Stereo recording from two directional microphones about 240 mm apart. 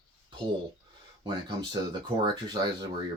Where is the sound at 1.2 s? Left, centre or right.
Centre.